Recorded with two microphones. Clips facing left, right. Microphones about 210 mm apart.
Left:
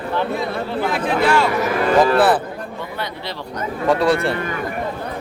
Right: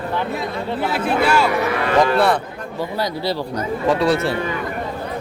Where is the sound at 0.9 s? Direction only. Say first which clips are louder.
Even; 5° right (ahead or behind).